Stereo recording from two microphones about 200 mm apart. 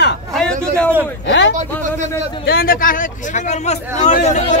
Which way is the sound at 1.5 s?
35° right (ahead or behind).